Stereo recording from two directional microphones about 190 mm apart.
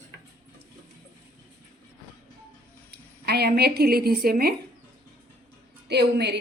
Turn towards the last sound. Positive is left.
turn(degrees=-60)  # may be behind; listen again after turning